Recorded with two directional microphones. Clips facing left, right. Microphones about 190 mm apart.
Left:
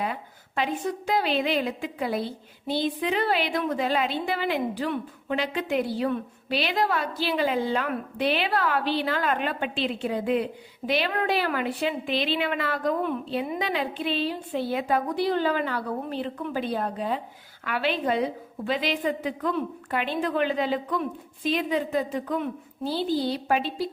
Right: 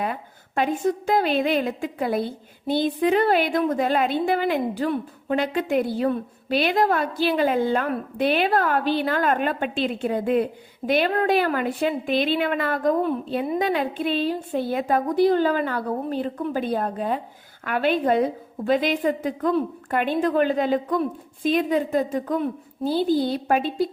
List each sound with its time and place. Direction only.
0.0 s a woman's voice: 50° right (ahead or behind)